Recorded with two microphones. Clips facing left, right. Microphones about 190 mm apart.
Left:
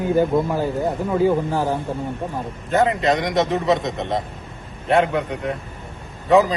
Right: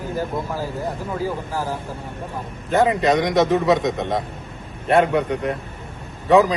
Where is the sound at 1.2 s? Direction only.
25° left (ahead or behind).